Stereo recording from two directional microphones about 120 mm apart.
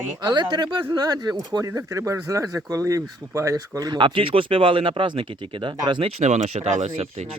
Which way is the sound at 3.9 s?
45° right (ahead or behind).